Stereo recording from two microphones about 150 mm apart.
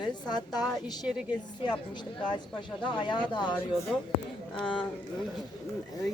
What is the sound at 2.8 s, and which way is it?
Speech, 30° left (ahead or behind).